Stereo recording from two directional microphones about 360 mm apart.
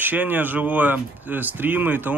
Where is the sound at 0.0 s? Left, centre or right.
Centre.